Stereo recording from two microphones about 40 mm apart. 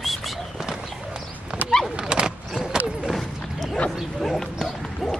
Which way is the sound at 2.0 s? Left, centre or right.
Centre.